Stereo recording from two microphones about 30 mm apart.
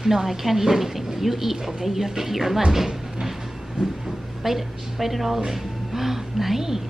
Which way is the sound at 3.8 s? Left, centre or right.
Right.